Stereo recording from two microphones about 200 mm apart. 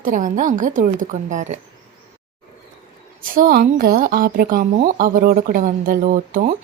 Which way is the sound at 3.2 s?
45° right (ahead or behind).